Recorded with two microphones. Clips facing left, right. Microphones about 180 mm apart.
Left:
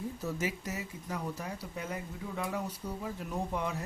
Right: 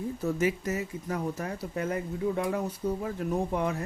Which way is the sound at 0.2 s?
55° right (ahead or behind).